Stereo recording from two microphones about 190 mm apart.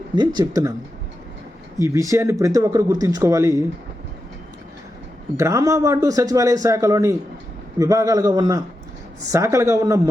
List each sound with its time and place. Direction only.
0.2 s speech: 20° right (ahead or behind)
1.8 s a man's voice: 15° right (ahead or behind)
5.4 s a man's voice: 15° right (ahead or behind)